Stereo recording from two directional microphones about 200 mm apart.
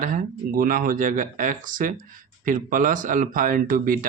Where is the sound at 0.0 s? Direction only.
45° right (ahead or behind).